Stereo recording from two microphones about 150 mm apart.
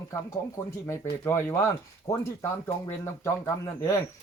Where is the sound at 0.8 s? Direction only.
15° left (ahead or behind).